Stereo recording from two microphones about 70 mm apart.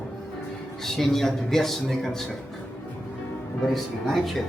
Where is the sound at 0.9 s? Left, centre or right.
Centre.